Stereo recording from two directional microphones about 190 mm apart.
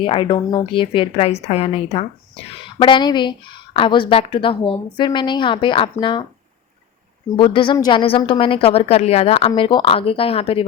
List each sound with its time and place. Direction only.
0.0 s a woman's voice: 25° left (ahead or behind)
7.3 s a woman's voice: 25° left (ahead or behind)